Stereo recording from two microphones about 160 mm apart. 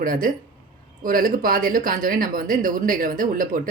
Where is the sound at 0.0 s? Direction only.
60° right (ahead or behind).